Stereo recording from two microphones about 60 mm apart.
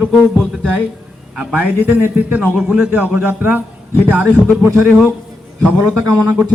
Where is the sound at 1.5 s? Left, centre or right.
Right.